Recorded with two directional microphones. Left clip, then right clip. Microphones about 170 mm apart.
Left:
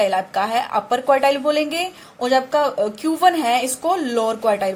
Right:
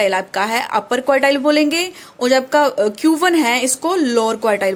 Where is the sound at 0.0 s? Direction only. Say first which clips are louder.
Right 2 dB; 30° right (ahead or behind).